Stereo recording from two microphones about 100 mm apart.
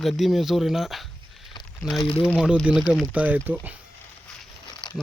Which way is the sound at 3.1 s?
15° right (ahead or behind).